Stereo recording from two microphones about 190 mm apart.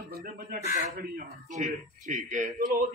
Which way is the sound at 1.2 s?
40° right (ahead or behind).